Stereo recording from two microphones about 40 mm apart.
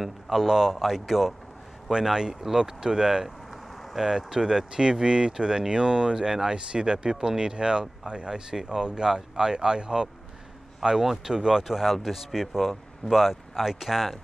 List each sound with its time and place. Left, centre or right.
0.0 s speech: centre
11.0 s speech: centre